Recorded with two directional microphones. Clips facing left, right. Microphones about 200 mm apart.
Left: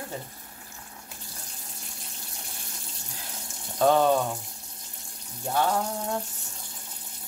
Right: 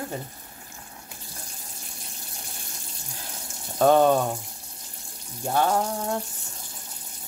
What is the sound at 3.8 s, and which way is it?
Speech, 50° right (ahead or behind).